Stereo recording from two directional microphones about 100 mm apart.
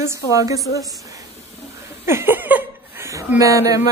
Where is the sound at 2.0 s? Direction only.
25° right (ahead or behind).